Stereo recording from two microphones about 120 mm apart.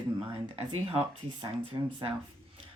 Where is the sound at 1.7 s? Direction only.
40° right (ahead or behind).